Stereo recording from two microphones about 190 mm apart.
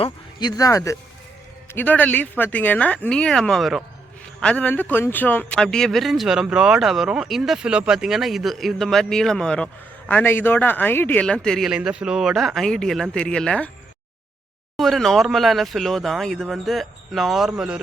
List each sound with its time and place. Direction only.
0.0 s speech: 20° left (ahead or behind); by 13.7 s 5° left (ahead or behind)
14.8 s speech: centre (ahead or behind)